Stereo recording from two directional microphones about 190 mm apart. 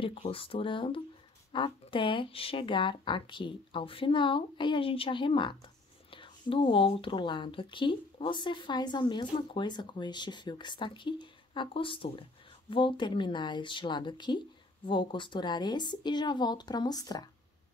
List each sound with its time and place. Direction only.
0.0 s speech: 30° left (ahead or behind)